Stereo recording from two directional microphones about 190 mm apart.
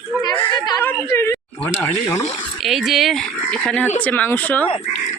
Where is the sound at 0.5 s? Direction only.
20° left (ahead or behind).